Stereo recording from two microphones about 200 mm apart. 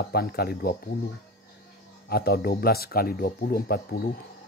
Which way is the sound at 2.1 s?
50° left (ahead or behind).